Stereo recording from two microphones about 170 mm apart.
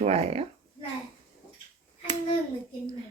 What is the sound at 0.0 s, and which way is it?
Speech, 40° right (ahead or behind).